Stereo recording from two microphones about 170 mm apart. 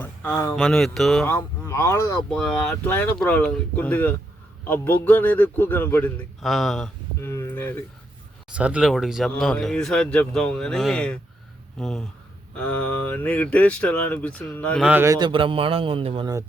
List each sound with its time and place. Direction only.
0.0 s a sound: 10° left (ahead or behind)
0.5 s speech: centre (ahead or behind)
1.2 s speech: 15° left (ahead or behind)
2.3 s speech: 5° left (ahead or behind)
6.4 s speech: centre (ahead or behind)
7.2 s speech: 15° left (ahead or behind)
8.5 s speech: 5° right (ahead or behind); by 14.8 s 10° left (ahead or behind)
14.8 s a man's voice: 15° right (ahead or behind)
15.3 s a man's voice: 30° right (ahead or behind)